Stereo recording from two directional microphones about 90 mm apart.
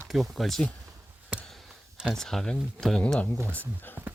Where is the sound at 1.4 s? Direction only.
Centre (ahead or behind).